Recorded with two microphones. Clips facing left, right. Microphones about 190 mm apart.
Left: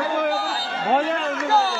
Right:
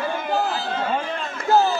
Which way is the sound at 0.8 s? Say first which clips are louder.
Left 5 dB; 70° left (ahead or behind).